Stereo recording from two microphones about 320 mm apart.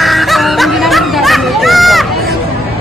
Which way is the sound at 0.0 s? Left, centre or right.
Centre.